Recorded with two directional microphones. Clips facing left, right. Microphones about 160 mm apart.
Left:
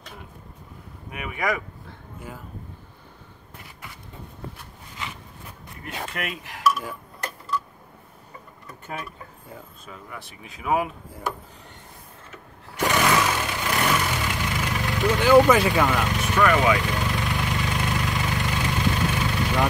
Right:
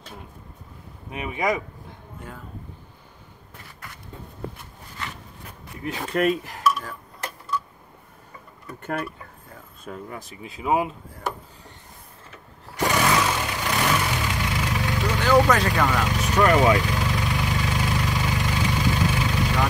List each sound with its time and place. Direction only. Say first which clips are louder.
1.1 s speech: right 2 dB; 25° right (ahead or behind)
6.1 s dishes: right 11 dB; 40° right (ahead or behind)
6.7 s dishes: left 1 dB; 5° left (ahead or behind)
9.8 s speech: right 6 dB; 45° right (ahead or behind)
10.5 s speech: right 1 dB; 25° right (ahead or behind)
12.8 s vehicle: even; centre (ahead or behind)
16.4 s dishes: right 2 dB; 30° right (ahead or behind)
16.8 s vehicle: right 1 dB; centre (ahead or behind)